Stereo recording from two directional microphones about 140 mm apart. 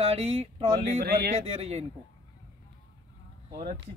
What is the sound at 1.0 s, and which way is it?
Speech, 90° right.